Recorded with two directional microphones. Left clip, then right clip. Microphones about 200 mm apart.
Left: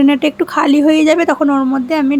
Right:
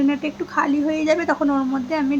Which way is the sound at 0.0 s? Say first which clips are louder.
Left 10 dB; 45° left (ahead or behind).